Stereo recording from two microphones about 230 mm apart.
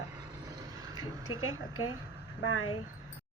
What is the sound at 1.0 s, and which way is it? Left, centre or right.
Speech, left.